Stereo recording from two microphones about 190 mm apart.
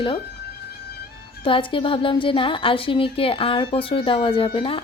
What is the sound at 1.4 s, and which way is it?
A woman's voice, 25° left (ahead or behind).